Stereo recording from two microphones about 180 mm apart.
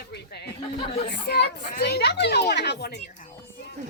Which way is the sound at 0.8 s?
35° left (ahead or behind).